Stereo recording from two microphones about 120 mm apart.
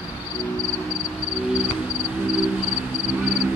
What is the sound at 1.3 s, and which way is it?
Cricket, 10° right (ahead or behind).